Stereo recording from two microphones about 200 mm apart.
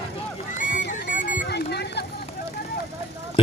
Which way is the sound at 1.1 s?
40° left (ahead or behind).